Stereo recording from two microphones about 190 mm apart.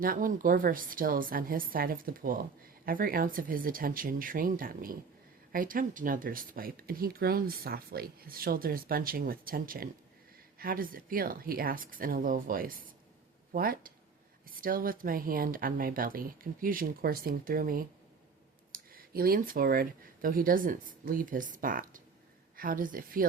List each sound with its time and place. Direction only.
0.0 s speech: 45° right (ahead or behind)